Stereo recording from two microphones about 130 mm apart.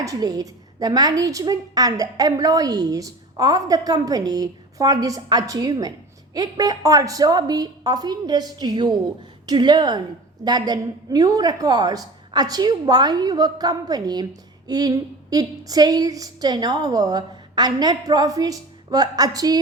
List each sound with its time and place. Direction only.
0.0 s a woman's voice: 30° right (ahead or behind)